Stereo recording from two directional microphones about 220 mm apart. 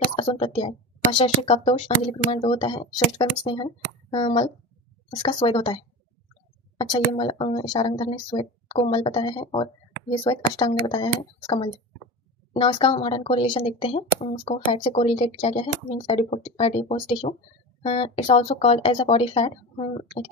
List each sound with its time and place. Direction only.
0.1 s speech: 25° left (ahead or behind)
7.2 s speech: 25° left (ahead or behind)